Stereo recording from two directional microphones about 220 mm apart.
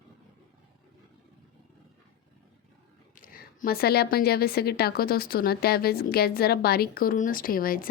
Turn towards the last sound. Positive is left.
turn(degrees=40)  # may be behind; listen again after turning